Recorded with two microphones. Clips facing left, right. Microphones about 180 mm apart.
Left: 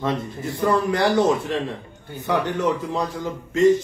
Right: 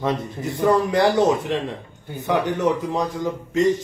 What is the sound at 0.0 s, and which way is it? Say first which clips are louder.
Speech: right 1 dB; 15° right (ahead or behind).